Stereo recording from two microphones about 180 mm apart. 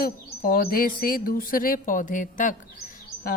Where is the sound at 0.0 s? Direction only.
55° left (ahead or behind).